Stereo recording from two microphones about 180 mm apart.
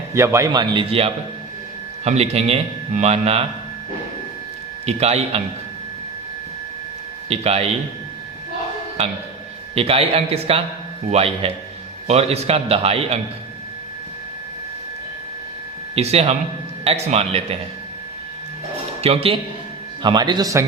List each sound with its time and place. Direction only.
0.1 s a man's voice: 15° right (ahead or behind); by 3.4 s 35° right (ahead or behind)
4.9 s a man's voice: 35° right (ahead or behind)
7.3 s a man's voice: 35° right (ahead or behind)
9.7 s a man's voice: 35° right (ahead or behind)
16.0 s a man's voice: 35° right (ahead or behind)
19.0 s a man's voice: 30° right (ahead or behind)